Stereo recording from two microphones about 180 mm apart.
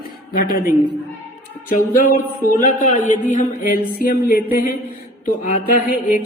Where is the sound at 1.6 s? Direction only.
50° left (ahead or behind).